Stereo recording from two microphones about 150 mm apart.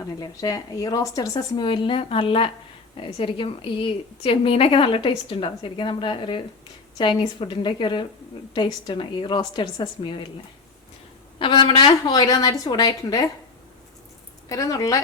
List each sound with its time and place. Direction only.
0.0 s a woman's voice: 25° left (ahead or behind)
11.3 s speech: 30° left (ahead or behind)
14.5 s speech: 20° left (ahead or behind)